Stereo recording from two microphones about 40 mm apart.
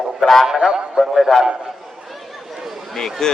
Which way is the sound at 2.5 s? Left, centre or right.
Centre.